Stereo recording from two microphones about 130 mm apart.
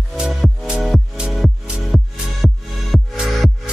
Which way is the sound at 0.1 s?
Centre (ahead or behind).